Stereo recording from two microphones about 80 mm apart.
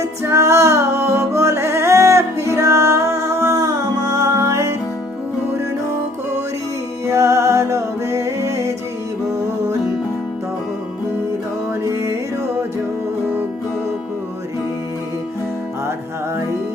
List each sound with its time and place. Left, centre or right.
0.0 s music: right
7.1 s music: right
11.8 s music: right